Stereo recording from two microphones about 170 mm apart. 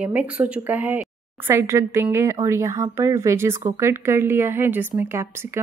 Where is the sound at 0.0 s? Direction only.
5° right (ahead or behind).